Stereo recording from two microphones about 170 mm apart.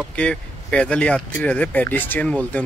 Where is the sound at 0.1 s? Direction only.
5° left (ahead or behind).